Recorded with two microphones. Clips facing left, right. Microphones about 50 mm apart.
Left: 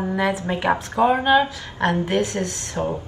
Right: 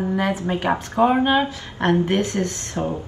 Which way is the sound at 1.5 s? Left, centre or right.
Right.